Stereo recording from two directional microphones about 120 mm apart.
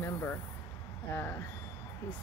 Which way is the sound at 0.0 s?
20° left (ahead or behind).